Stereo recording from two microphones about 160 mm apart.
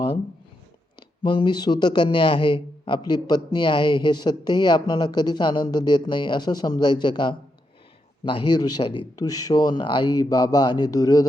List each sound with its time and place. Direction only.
0.9 s speech: 30° left (ahead or behind)